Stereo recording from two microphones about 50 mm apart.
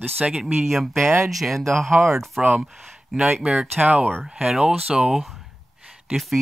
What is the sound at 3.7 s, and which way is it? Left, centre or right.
Speech, right.